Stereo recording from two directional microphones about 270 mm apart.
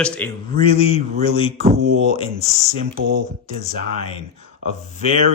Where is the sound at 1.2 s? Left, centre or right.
Left.